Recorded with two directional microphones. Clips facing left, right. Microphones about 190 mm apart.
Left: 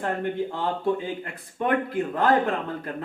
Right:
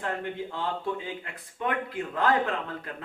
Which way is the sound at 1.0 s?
45° left (ahead or behind).